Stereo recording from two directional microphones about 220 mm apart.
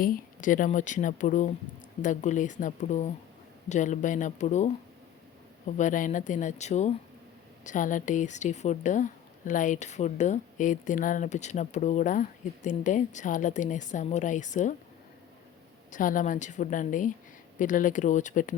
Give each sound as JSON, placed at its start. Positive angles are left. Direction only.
{"t": 0.0, "sound": "speech", "side_deg": 35}
{"t": 15.9, "sound": "speech", "side_deg": 35}